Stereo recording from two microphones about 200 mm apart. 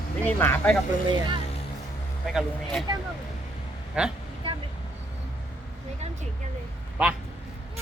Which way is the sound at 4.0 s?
5° right (ahead or behind).